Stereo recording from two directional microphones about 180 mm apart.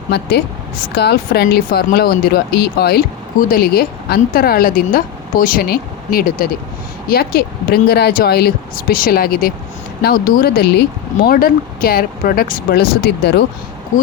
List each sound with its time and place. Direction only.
0.1 s speech: 70° left (ahead or behind)
11.3 s speech: 55° left (ahead or behind)